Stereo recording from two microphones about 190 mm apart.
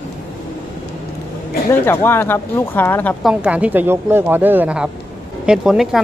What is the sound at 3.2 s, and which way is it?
Speech, 5° right (ahead or behind).